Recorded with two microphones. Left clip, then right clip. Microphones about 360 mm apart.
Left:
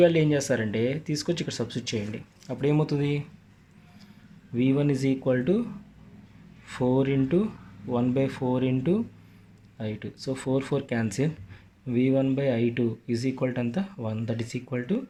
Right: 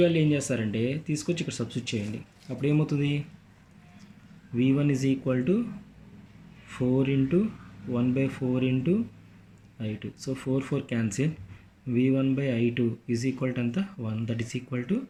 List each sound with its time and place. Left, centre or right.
0.0 s speech: centre
4.5 s speech: centre
6.9 s speech: centre